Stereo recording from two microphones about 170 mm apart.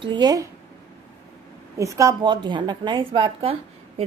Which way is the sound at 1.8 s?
20° right (ahead or behind).